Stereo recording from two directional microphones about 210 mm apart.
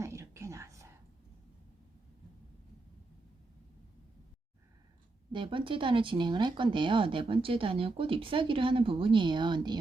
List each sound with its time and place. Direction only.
0.0 s whispering: 15° right (ahead or behind)
5.3 s speech: 25° right (ahead or behind)